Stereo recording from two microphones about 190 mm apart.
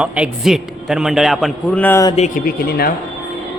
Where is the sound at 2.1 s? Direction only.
40° left (ahead or behind).